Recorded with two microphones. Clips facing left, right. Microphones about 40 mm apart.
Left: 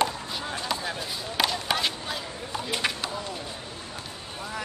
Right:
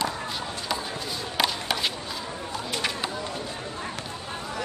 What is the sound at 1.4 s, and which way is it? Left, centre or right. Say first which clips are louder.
Chop: even; centre.